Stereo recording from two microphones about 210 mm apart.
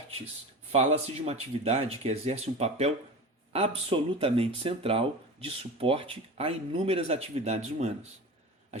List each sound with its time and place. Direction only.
0.7 s speech: 30° right (ahead or behind)